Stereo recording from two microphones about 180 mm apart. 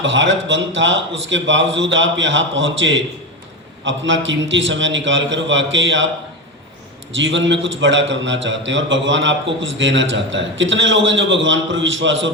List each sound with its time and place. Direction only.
0.0 s a man's voice: 90° right
7.2 s a man's voice: 90° right